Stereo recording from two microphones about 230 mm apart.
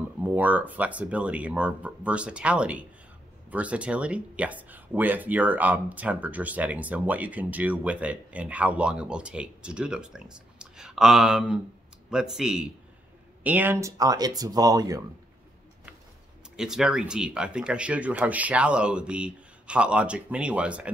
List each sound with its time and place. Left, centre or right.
0.2 s speech: centre
16.5 s speech: centre